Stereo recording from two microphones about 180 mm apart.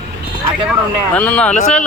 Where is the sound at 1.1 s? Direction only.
5° left (ahead or behind).